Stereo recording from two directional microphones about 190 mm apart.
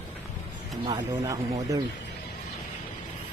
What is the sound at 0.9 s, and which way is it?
Speech, 20° right (ahead or behind).